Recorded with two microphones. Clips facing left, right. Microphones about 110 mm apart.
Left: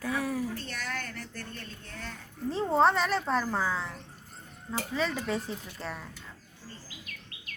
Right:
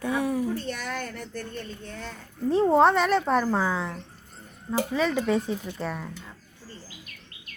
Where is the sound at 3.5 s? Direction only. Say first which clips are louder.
Right 5 dB; 15° right (ahead or behind).